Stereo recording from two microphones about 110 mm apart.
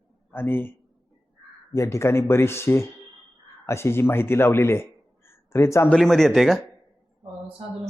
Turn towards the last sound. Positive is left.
turn(degrees=0)  # may be behind; listen again after turning